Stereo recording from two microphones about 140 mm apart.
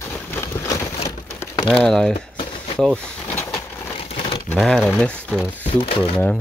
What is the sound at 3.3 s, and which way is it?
Vehicle, 20° left (ahead or behind).